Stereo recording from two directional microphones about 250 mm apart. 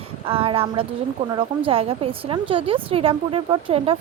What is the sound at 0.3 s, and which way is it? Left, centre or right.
A woman's voice, right.